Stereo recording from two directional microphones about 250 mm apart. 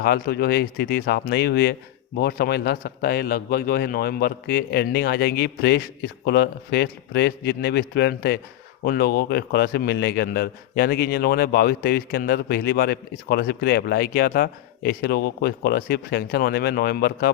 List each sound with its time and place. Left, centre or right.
0.0 s a man's voice: left